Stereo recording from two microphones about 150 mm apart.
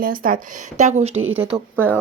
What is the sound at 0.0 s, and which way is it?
Speech, 70° right (ahead or behind).